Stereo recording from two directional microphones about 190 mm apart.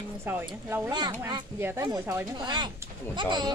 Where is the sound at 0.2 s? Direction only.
10° right (ahead or behind).